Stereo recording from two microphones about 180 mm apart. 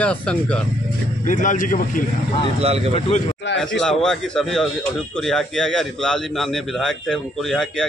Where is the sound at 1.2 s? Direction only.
45° left (ahead or behind).